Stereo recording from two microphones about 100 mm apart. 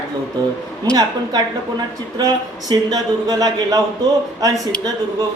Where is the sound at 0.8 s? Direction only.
40° right (ahead or behind).